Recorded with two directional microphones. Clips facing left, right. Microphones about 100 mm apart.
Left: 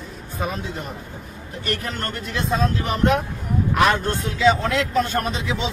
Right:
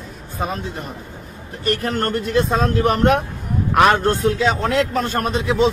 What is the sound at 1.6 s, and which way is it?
Speech, 45° right (ahead or behind).